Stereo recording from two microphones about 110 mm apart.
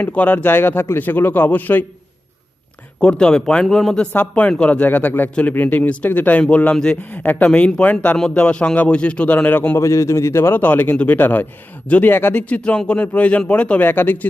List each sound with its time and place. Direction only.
0.0 s a man's voice: 15° left (ahead or behind)
3.0 s a man's voice: 10° left (ahead or behind)